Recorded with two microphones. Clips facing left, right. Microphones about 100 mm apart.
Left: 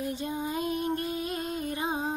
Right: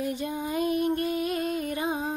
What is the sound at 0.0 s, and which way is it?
Music, 25° left (ahead or behind).